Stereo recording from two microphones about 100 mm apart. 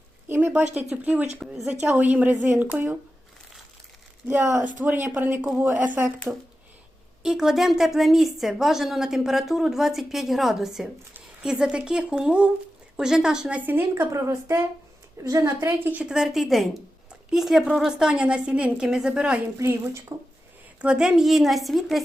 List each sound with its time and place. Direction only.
0.3 s a woman's voice: 20° right (ahead or behind)
1.5 s speech: 5° right (ahead or behind)
1.9 s a woman's voice: 15° right (ahead or behind)
4.3 s a woman's voice: 15° right (ahead or behind)
7.2 s a woman's voice: 5° right (ahead or behind)
13.7 s a woman's voice: 25° right (ahead or behind)
19.5 s a woman's voice: 30° right (ahead or behind)
20.8 s speech: 10° right (ahead or behind)